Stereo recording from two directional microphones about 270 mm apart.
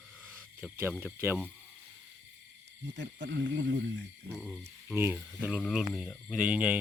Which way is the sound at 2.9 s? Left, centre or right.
Right.